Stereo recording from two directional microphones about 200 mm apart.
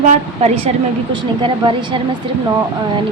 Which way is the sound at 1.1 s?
25° right (ahead or behind).